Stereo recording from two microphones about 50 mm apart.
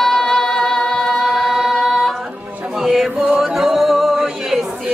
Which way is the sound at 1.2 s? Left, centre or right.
Centre.